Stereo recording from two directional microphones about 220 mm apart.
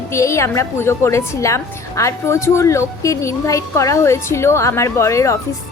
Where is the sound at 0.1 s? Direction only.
15° left (ahead or behind).